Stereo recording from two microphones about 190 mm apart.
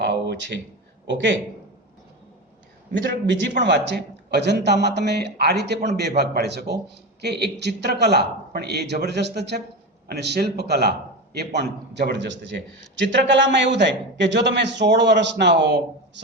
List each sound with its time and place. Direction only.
0.0 s a sound: 65° right (ahead or behind)
1.0 s a man's voice: 70° right (ahead or behind)
3.6 s a man's voice: 65° right (ahead or behind)